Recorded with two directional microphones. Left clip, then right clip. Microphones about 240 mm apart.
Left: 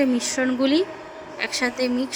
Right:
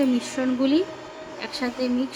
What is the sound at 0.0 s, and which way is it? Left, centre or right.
Speech, left.